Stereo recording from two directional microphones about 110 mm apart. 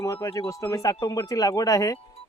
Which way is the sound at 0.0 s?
30° left (ahead or behind).